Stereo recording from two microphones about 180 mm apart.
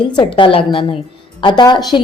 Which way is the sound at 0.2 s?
25° left (ahead or behind).